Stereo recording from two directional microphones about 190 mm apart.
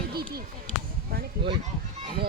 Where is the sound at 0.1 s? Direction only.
55° right (ahead or behind).